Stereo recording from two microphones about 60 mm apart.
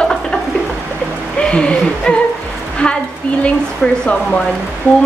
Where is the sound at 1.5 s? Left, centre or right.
Centre.